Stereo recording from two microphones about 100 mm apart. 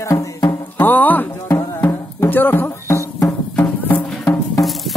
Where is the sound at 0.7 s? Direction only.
20° left (ahead or behind).